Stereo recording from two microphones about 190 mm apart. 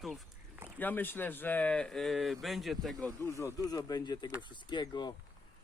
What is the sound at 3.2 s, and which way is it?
Speech, 15° left (ahead or behind).